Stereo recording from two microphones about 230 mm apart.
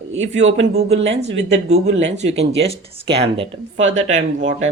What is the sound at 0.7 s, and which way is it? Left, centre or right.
Speech, right.